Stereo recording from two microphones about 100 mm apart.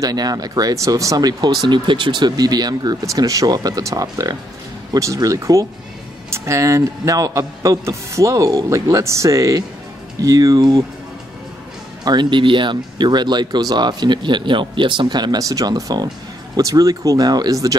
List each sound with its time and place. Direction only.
0.0 s speech: 40° right (ahead or behind)
12.0 s speech: 45° right (ahead or behind)